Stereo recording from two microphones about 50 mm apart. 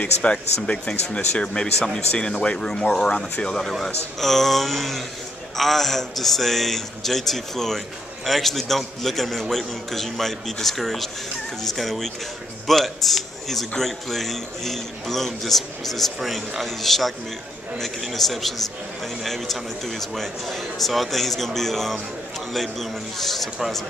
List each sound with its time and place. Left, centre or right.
0.0 s a man's voice: left; by 23.8 s centre